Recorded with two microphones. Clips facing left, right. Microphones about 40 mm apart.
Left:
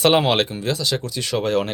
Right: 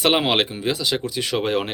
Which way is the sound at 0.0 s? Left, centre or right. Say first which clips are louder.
Left 2 dB; centre.